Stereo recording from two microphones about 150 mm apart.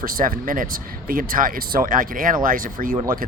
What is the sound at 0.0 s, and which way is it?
Speech, 70° right (ahead or behind).